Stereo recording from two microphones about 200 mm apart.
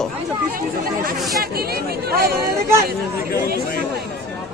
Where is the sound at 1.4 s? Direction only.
50° right (ahead or behind).